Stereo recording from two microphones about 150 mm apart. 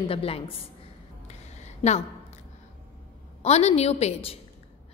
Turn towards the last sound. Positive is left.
turn(degrees=40)  # may be behind; listen again after turning